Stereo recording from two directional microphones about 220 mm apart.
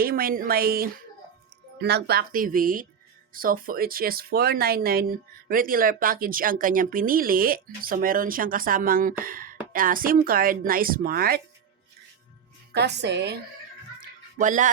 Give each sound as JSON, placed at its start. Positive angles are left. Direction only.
{"t": 0.0, "sound": "speech", "side_deg": -40}
{"t": 12.7, "sound": "a woman's voice", "side_deg": -50}
{"t": 14.3, "sound": "speech", "side_deg": -35}